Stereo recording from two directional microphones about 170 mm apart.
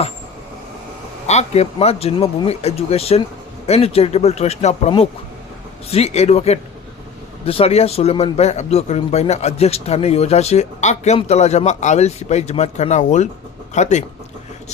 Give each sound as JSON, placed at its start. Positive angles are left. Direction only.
{"t": 1.3, "sound": "speech", "side_deg": 40}